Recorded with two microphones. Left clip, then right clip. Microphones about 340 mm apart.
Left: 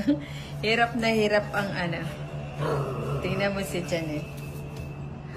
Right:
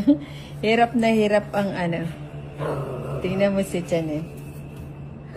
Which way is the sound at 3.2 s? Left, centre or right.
Centre.